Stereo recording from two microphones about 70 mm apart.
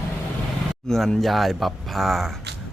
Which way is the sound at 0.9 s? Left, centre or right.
Centre.